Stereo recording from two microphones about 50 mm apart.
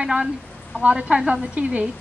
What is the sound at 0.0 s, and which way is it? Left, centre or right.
A woman's voice, centre.